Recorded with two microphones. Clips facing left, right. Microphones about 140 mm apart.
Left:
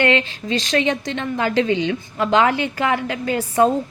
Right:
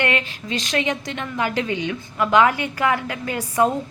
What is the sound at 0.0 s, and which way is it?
A woman's voice, 30° left (ahead or behind).